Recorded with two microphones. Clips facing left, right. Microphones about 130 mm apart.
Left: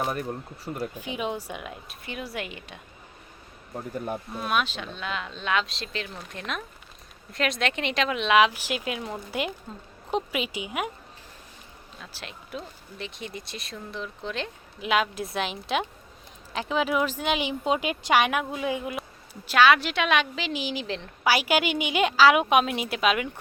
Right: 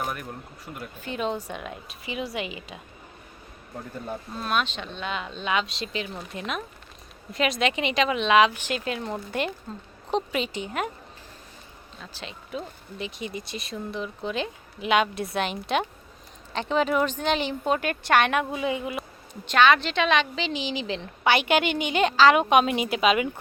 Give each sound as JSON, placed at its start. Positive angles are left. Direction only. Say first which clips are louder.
{"t": 0.0, "sound": "speech", "louder": "left 3 dB", "side_deg": 30}
{"t": 0.9, "sound": "speech", "louder": "right 2 dB", "side_deg": 10}
{"t": 4.0, "sound": "speech", "louder": "left 1 dB", "side_deg": 10}
{"t": 11.9, "sound": "speech", "louder": "right 2 dB", "side_deg": 0}